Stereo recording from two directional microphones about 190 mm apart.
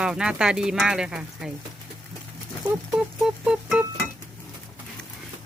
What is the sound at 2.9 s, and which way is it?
Music, 5° right (ahead or behind).